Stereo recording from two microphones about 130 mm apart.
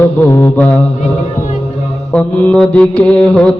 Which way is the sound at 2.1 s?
10° left (ahead or behind).